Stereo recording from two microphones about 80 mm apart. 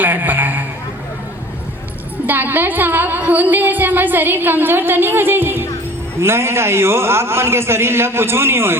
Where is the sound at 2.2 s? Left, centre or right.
Right.